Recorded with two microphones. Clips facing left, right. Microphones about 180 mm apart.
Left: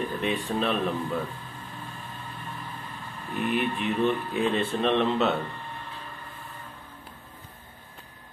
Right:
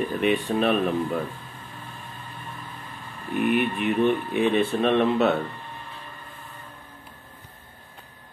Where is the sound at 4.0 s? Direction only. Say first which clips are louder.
Right 4 dB; 60° right (ahead or behind).